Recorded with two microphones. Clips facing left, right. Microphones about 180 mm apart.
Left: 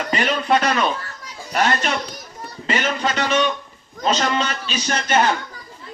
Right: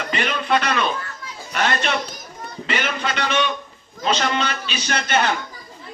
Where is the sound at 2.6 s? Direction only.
40° left (ahead or behind).